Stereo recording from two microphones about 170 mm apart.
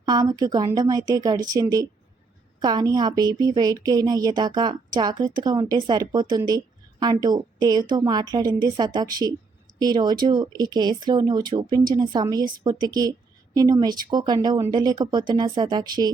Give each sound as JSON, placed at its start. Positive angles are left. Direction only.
{"t": 0.0, "sound": "speech", "side_deg": -25}